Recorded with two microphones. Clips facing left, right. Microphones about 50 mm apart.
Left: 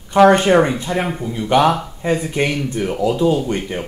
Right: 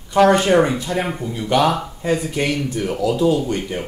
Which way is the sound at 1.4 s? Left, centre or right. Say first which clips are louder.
Left 3 dB; left.